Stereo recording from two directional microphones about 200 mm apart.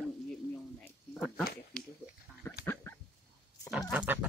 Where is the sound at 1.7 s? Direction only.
5° left (ahead or behind).